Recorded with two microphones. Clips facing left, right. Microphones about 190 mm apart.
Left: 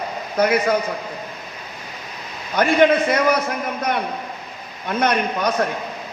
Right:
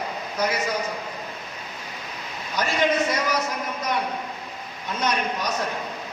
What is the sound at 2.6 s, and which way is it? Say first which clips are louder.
A man's voice: left 7 dB; 60° left (ahead or behind).